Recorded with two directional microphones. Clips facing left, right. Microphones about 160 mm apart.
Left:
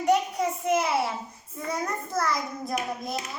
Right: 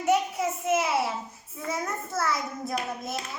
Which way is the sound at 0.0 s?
5° right (ahead or behind).